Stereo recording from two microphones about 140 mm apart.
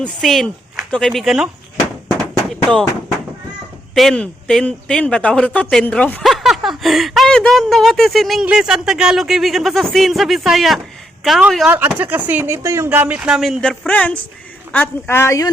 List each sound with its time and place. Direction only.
0.0 s speech: centre (ahead or behind)
2.5 s a sound: 5° left (ahead or behind)
3.9 s speech: 5° left (ahead or behind)
6.2 s speech: centre (ahead or behind)
11.7 s speech: 15° right (ahead or behind); by 15.4 s 20° left (ahead or behind)